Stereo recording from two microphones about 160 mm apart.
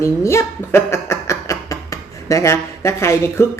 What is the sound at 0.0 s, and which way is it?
A child's voice, 20° left (ahead or behind).